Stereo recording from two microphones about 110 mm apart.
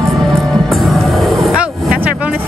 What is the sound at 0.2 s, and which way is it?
Music, centre (ahead or behind).